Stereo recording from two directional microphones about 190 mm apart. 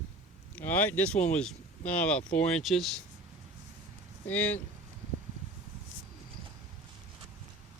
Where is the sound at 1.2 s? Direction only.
5° left (ahead or behind).